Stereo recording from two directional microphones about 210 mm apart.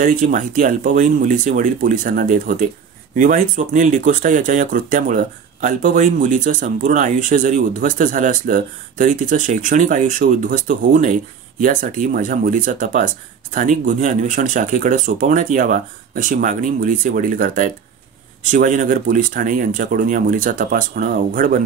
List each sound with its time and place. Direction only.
0.0 s speech: 40° right (ahead or behind)